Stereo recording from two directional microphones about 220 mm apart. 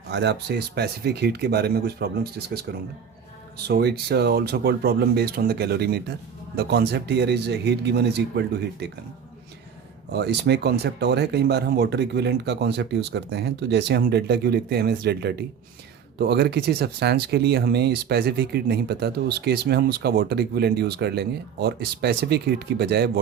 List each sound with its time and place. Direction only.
0.1 s speech: 50° right (ahead or behind)
3.7 s speech: 45° right (ahead or behind)
10.1 s speech: 50° right (ahead or behind)